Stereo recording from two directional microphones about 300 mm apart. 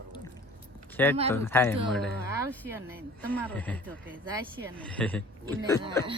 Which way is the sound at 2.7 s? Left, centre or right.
Centre.